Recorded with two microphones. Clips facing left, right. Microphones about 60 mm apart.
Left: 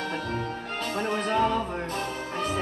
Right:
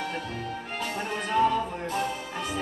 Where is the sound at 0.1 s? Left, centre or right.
Left.